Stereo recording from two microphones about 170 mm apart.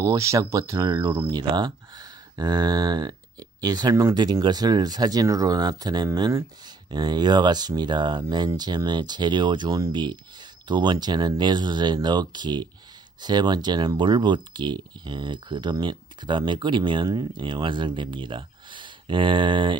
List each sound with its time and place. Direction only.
0.0 s speech: 20° right (ahead or behind)